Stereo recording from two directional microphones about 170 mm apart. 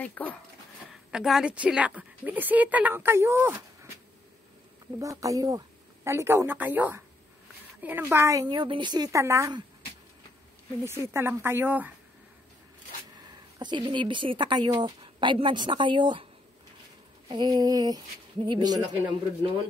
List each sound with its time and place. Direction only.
0.0 s speech: 10° left (ahead or behind)
1.1 s a woman's voice: 5° right (ahead or behind)
4.9 s a woman's voice: 20° right (ahead or behind)
10.9 s a woman's voice: 15° right (ahead or behind)
13.3 s speech: 25° right (ahead or behind)
17.3 s speech: 25° right (ahead or behind)